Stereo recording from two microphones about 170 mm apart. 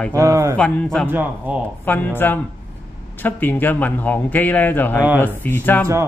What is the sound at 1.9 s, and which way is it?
A man's voice, 10° left (ahead or behind).